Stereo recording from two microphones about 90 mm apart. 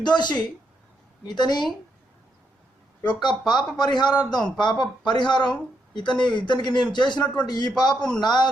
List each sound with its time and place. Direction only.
0.0 s speech: 55° left (ahead or behind)
3.1 s a man's voice: 55° left (ahead or behind)